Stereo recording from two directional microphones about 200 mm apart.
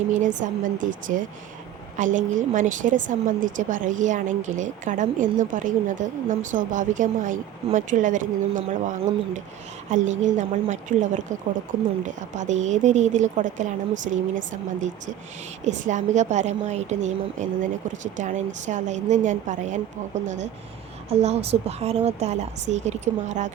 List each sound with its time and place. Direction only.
0.1 s a woman's voice: 40° right (ahead or behind)
15.6 s a woman's voice: 35° right (ahead or behind)